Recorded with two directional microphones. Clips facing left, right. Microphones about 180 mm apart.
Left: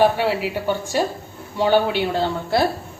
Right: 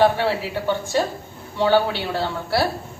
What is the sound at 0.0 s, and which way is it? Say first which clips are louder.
A woman's voice: left 1 dB; 15° left (ahead or behind).